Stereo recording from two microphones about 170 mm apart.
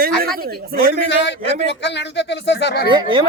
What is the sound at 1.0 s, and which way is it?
Speech, 90° left.